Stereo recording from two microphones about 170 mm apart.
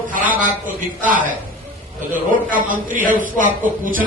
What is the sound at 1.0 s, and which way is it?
A woman's voice, 50° right (ahead or behind).